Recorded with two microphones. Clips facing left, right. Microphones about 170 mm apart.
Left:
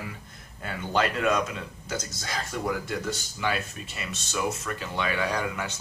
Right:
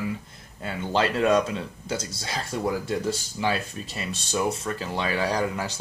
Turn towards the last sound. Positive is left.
turn(degrees=-35)  # may be behind; listen again after turning